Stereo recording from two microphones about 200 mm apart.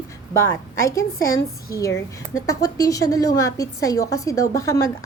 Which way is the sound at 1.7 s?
15° left (ahead or behind).